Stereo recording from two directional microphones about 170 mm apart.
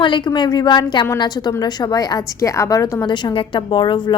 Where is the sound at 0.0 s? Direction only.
25° left (ahead or behind).